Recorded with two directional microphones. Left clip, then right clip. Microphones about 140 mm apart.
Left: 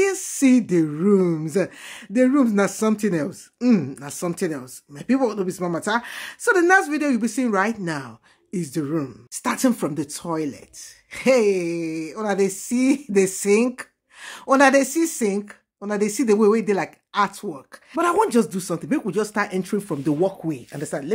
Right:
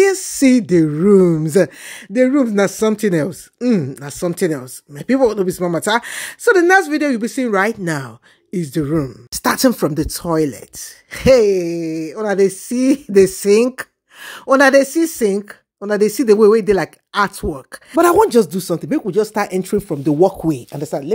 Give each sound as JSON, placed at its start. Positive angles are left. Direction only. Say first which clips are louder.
{"t": 0.0, "sound": "speech", "louder": "right 7 dB", "side_deg": -35}
{"t": 2.1, "sound": "speech", "louder": "right 5 dB", "side_deg": -25}
{"t": 3.5, "sound": "speech", "louder": "right 3 dB", "side_deg": -20}
{"t": 4.4, "sound": "speech", "louder": "right 8 dB", "side_deg": -40}
{"t": 6.4, "sound": "speech", "louder": "right 5 dB", "side_deg": -30}
{"t": 8.5, "sound": "speech", "louder": "right 6 dB", "side_deg": -25}
{"t": 9.3, "sound": "speech", "louder": "right 7 dB", "side_deg": -60}
{"t": 11.3, "sound": "speech", "louder": "right 6 dB", "side_deg": -25}
{"t": 19.8, "sound": "speech", "louder": "right 5 dB", "side_deg": -25}
{"t": 20.2, "sound": "speech", "louder": "right 9 dB", "side_deg": -50}
{"t": 20.7, "sound": "speech", "louder": "right 6 dB", "side_deg": -25}